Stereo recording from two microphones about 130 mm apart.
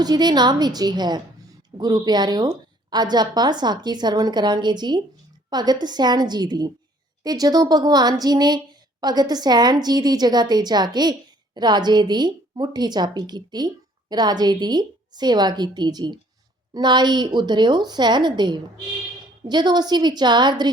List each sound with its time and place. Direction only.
0.0 s a woman's voice: 30° right (ahead or behind)